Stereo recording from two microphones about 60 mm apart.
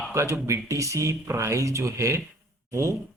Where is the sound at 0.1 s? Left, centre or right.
Right.